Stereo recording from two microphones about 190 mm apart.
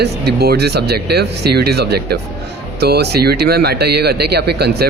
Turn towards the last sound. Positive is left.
turn(degrees=-60)  # may be behind; listen again after turning